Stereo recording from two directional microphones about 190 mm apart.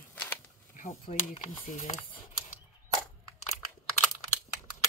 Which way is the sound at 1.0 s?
30° left (ahead or behind).